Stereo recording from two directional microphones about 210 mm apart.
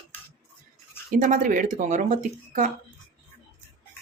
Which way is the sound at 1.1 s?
35° right (ahead or behind).